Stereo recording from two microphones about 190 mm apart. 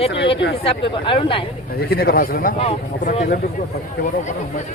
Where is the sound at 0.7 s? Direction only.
25° left (ahead or behind).